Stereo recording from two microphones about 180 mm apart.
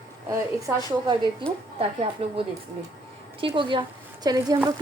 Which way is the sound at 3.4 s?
30° right (ahead or behind).